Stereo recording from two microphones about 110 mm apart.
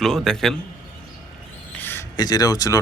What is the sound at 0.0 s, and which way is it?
Speech, 5° left (ahead or behind).